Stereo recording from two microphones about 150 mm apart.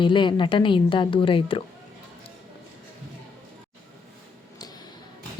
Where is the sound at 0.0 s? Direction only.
35° left (ahead or behind).